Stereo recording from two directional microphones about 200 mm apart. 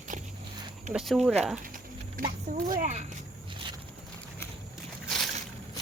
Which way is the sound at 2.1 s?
40° right (ahead or behind).